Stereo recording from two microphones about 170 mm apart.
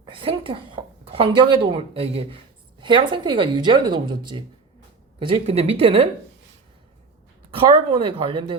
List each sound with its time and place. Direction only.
0.0 s a woman's voice: 30° right (ahead or behind)
7.5 s speech: 30° right (ahead or behind)